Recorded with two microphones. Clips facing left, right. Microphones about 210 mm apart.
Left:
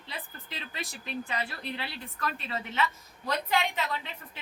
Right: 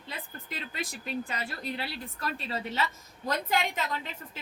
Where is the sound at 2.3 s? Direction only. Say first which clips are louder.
Right 2 dB; 35° right (ahead or behind).